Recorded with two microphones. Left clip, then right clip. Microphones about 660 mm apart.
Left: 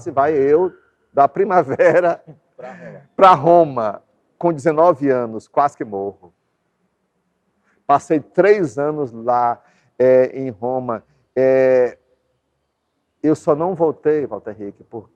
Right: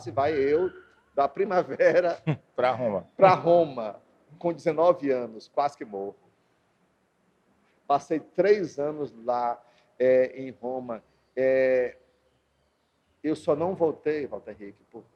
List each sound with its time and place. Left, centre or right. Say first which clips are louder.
0.1 s a man's voice: left 9 dB; left
3.2 s speech: left 9 dB; left
7.9 s speech: left 10 dB; left
13.2 s a man's voice: left 9 dB; left